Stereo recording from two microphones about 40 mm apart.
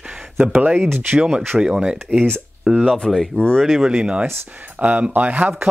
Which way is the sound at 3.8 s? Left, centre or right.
Right.